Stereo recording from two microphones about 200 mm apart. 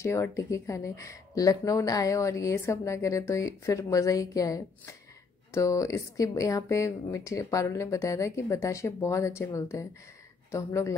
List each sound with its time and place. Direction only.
0.0 s speech: 15° left (ahead or behind)